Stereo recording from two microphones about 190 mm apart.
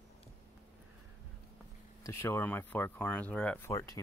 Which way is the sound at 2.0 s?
10° left (ahead or behind).